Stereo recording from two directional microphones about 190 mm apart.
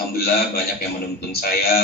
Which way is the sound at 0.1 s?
55° left (ahead or behind).